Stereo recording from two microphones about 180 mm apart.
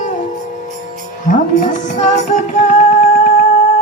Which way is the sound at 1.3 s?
45° left (ahead or behind).